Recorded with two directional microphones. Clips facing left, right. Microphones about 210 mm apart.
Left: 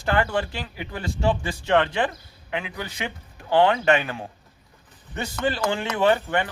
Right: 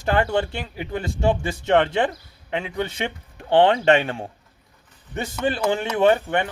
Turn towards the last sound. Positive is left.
turn(degrees=-25)  # may be behind; listen again after turning